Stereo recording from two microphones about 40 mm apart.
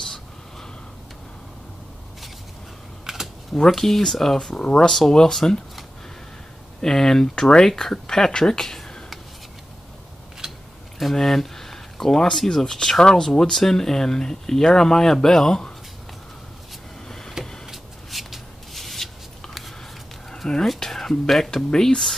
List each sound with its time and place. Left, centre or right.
3.1 s typing: centre
3.5 s speech: centre
4.5 s speech: left
6.8 s speech: centre
10.4 s a sound: centre
11.1 s speech: centre
17.6 s shuffle: centre
20.4 s whispering: centre
20.8 s a sound: centre
21.7 s speech: centre